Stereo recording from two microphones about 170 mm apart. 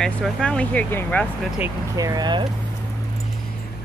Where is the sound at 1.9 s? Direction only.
20° right (ahead or behind).